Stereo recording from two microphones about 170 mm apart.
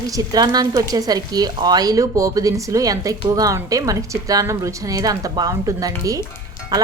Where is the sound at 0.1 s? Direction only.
20° right (ahead or behind).